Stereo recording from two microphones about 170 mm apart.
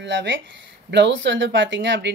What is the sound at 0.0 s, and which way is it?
Speech, 90° right.